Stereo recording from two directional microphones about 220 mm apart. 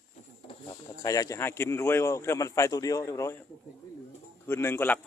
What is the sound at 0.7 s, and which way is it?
Speech, 15° left (ahead or behind).